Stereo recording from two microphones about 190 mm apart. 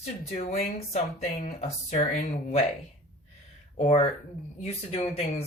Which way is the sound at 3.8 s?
35° left (ahead or behind).